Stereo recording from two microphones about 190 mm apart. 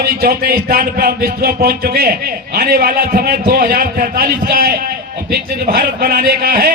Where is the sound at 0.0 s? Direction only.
50° right (ahead or behind).